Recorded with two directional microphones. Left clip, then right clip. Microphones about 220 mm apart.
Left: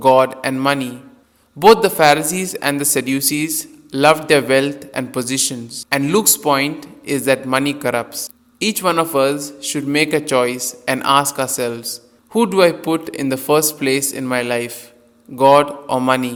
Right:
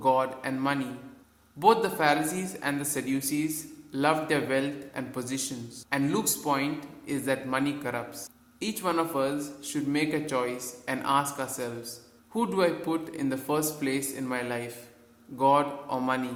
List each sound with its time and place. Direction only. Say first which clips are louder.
0.0 s a man's voice: left 13 dB; 40° left (ahead or behind)